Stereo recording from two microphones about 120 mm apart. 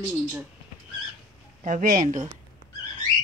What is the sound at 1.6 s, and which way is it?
Speech, 90° right.